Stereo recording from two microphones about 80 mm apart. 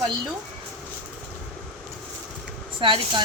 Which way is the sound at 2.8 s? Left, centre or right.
Right.